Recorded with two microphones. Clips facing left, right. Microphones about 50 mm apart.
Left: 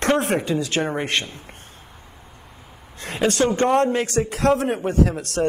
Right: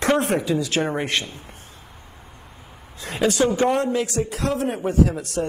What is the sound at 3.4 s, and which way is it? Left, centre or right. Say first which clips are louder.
Speech: even; centre.